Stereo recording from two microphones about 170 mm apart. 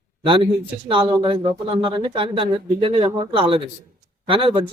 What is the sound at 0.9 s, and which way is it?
Speech, 30° right (ahead or behind).